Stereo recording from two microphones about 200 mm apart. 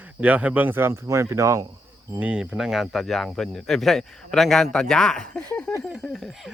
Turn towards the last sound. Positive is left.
turn(degrees=0)  # may be behind; listen again after turning